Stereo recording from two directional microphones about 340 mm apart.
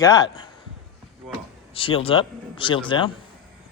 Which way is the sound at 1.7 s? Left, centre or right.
Centre.